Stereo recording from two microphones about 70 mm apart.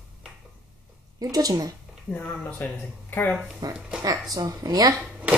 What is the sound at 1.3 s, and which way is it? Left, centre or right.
Speech, right.